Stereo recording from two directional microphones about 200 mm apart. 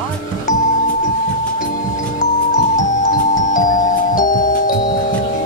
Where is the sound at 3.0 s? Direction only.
40° left (ahead or behind).